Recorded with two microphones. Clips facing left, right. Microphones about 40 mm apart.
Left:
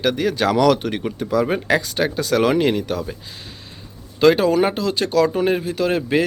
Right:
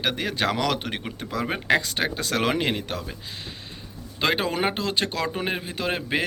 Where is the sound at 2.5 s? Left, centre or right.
Right.